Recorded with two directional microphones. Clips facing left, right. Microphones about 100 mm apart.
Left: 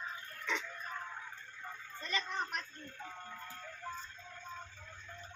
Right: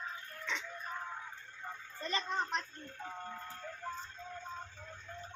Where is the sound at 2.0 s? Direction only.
25° right (ahead or behind).